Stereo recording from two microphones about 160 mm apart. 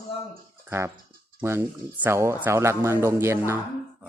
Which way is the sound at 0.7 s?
15° right (ahead or behind).